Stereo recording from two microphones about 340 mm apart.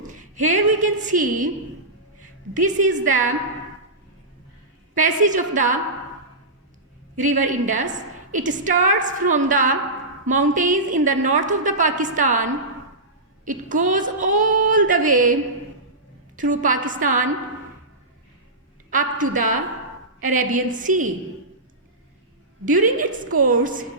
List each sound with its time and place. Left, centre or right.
0.1 s a sound: right
2.5 s a woman's voice: right
4.9 s a woman's voice: right
7.2 s a woman's voice: right
18.9 s a woman's voice: right
22.6 s a woman's voice: right